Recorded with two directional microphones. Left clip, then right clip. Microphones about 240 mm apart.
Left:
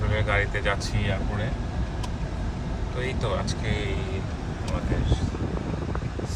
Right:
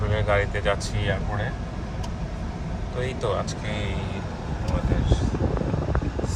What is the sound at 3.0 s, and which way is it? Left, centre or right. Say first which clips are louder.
Speech: right 2 dB; centre.